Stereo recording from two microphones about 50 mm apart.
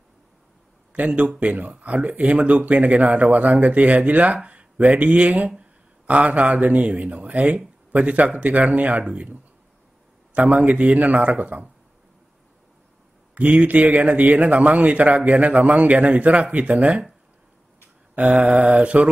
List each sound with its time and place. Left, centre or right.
0.9 s speech: right
10.3 s speech: right
13.3 s speech: right
18.1 s speech: right